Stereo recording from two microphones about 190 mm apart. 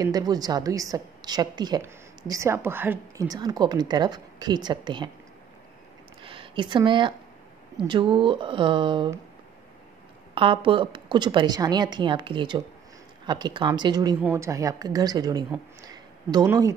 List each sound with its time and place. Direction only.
0.0 s a woman's voice: 20° right (ahead or behind)
6.2 s a woman's voice: 30° right (ahead or behind)
10.3 s a woman's voice: 30° right (ahead or behind)
15.9 s a sound: 20° right (ahead or behind)